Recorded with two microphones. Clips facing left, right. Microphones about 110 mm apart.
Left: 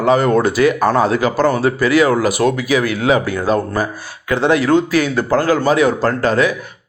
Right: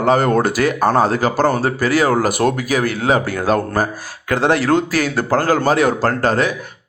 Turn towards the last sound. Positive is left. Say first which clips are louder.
# left 1 dB
turn(degrees=-35)  # may be behind; listen again after turning